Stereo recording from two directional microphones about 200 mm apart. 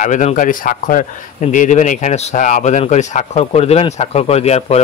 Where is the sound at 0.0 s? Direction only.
35° left (ahead or behind).